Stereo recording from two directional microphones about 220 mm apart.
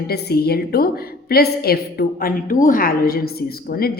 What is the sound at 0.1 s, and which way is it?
A woman's voice, 45° left (ahead or behind).